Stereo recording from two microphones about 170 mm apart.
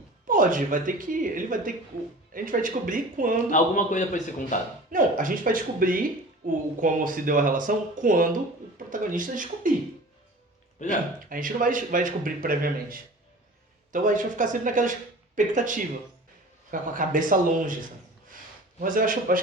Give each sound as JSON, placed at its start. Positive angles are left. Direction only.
{"t": 0.3, "sound": "speech", "side_deg": -50}
{"t": 3.5, "sound": "a man's voice", "side_deg": 45}
{"t": 4.9, "sound": "a woman's voice", "side_deg": -50}
{"t": 10.8, "sound": "a man's voice", "side_deg": 45}
{"t": 11.3, "sound": "speech", "side_deg": -55}
{"t": 18.8, "sound": "speech", "side_deg": -55}